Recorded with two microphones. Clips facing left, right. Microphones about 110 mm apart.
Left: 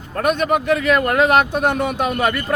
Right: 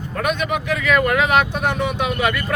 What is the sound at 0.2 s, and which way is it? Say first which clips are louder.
Speech: left 4 dB; 45° left (ahead or behind).